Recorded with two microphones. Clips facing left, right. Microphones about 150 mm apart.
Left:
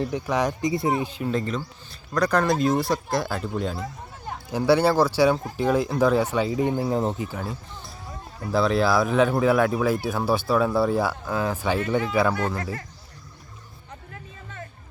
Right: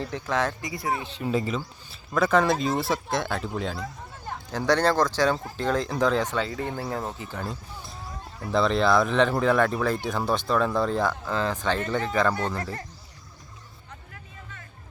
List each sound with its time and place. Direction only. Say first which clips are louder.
0.0 s speech: left 3 dB; 15° left (ahead or behind)
0.7 s speech: left 6 dB; 25° left (ahead or behind)
1.0 s speech: left 3 dB; 10° left (ahead or behind)
1.3 s speech: right 4 dB; 5° right (ahead or behind); by 7.3 s 20° left (ahead or behind)
7.3 s speech: left 1 dB; 5° left (ahead or behind)
8.5 s speech: left 1 dB; 5° left (ahead or behind)